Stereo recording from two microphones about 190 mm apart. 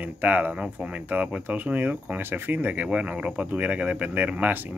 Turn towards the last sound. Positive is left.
turn(degrees=-10)  # may be behind; listen again after turning